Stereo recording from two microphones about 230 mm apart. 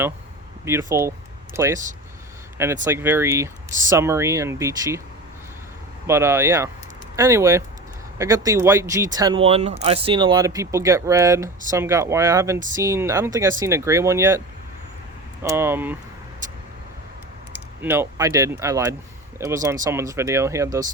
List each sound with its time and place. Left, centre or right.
0.6 s speech: centre
2.8 s speech: centre
6.1 s speech: centre
15.4 s speech: centre
17.8 s speech: centre